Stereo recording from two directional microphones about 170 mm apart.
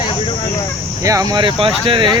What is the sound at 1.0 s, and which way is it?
Speech, 20° right (ahead or behind).